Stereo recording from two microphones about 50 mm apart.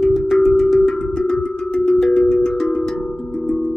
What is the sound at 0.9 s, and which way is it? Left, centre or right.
Music, centre.